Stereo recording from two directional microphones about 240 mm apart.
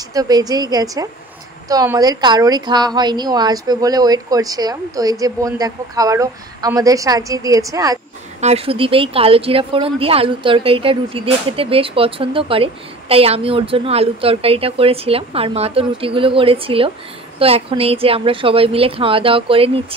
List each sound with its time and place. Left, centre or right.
0.1 s a woman's voice: centre
8.4 s speech: right